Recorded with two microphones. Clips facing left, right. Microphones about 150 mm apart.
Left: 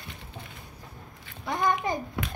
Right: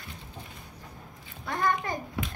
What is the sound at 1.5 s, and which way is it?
Speech, 15° left (ahead or behind).